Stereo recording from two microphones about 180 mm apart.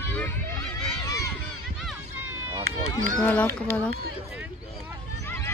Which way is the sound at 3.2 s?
10° left (ahead or behind).